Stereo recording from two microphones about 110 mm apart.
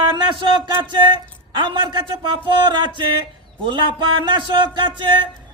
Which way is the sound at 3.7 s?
45° right (ahead or behind).